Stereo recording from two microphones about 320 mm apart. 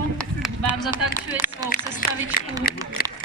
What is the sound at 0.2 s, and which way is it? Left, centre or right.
Music, centre.